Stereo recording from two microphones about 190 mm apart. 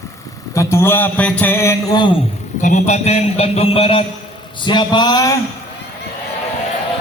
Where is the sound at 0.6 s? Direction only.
15° left (ahead or behind).